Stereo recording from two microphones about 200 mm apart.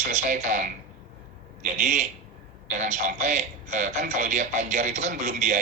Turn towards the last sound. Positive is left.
turn(degrees=-40)  # may be behind; listen again after turning